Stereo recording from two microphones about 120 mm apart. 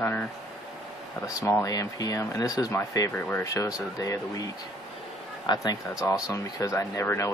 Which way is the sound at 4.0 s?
30° left (ahead or behind).